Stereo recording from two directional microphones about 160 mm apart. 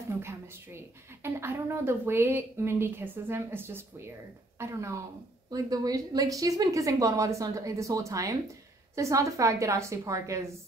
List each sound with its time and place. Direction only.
0.2 s a woman's voice: 15° right (ahead or behind)